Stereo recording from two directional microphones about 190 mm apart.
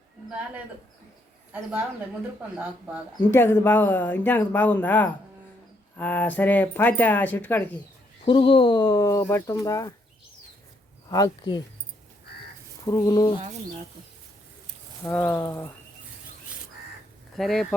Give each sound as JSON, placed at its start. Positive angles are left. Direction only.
{"t": 3.2, "sound": "speech", "side_deg": 10}
{"t": 8.2, "sound": "speech", "side_deg": 30}
{"t": 11.1, "sound": "speech", "side_deg": 20}
{"t": 12.8, "sound": "speech", "side_deg": 20}
{"t": 15.0, "sound": "speech", "side_deg": 10}
{"t": 17.3, "sound": "speech", "side_deg": 0}